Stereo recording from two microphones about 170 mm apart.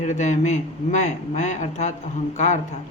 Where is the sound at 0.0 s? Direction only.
45° left (ahead or behind).